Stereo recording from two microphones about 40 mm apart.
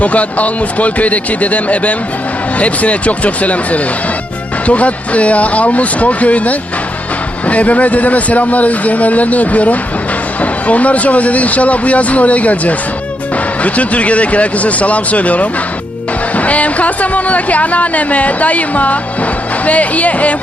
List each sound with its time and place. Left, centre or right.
0.0 s speech: left